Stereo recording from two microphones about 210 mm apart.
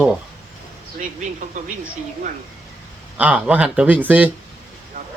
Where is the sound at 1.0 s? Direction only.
35° right (ahead or behind).